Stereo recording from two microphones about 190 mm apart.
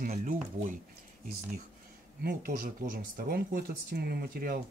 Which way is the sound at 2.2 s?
55° right (ahead or behind).